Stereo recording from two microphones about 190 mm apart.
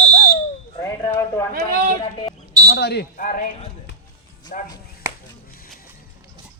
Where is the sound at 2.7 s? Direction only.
60° left (ahead or behind).